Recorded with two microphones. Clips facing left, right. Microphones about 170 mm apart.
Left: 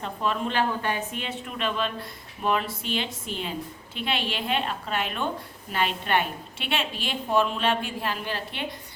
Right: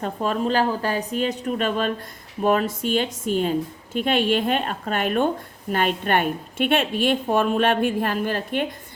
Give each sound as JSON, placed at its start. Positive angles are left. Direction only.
{"t": 0.0, "sound": "a woman's voice", "side_deg": -40}